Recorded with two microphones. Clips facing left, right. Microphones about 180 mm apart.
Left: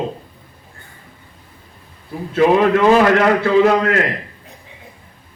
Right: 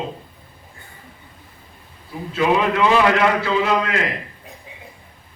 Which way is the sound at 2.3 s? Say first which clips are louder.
Left 5 dB; 45° left (ahead or behind).